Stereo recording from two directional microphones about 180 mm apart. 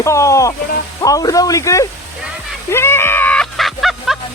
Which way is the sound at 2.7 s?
15° left (ahead or behind).